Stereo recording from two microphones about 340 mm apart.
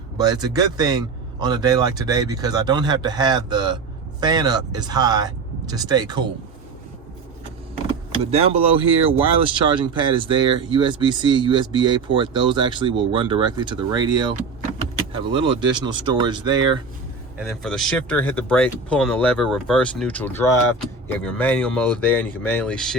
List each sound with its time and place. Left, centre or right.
0.2 s speech: centre
8.2 s speech: centre
17.3 s speech: centre